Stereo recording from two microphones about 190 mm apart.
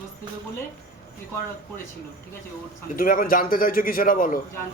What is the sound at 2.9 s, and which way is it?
A man's voice, 45° left (ahead or behind).